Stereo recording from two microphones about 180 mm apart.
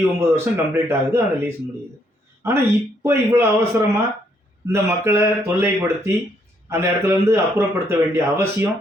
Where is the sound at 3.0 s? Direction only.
15° right (ahead or behind).